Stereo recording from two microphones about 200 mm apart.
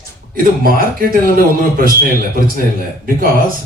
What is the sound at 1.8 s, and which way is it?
Speech, 45° right (ahead or behind).